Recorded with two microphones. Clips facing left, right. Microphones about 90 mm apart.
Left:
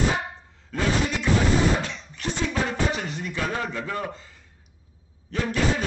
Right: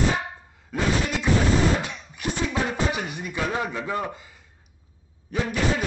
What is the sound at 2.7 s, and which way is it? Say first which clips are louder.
A man's voice: even; 15° right (ahead or behind).